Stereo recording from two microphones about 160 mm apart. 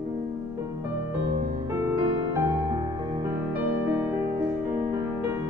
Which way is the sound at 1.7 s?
15° right (ahead or behind).